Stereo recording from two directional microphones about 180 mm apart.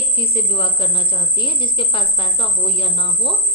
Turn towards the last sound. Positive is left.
turn(degrees=30)  # may be behind; listen again after turning